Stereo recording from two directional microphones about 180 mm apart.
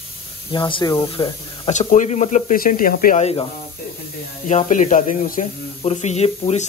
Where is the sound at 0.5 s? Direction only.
25° left (ahead or behind).